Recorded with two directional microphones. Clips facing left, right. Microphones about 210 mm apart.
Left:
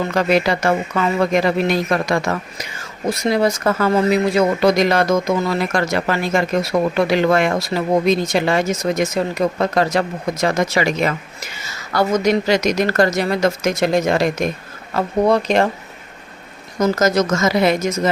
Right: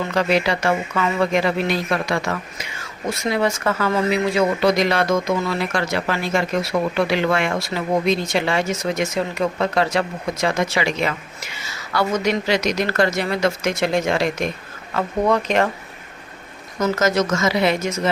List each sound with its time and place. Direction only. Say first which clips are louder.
0.1 s speech: left 2 dB; 45° left (ahead or behind)
16.8 s speech: left 3 dB; 40° left (ahead or behind)